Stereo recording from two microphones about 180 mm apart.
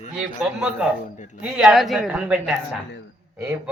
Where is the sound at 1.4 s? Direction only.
Centre (ahead or behind).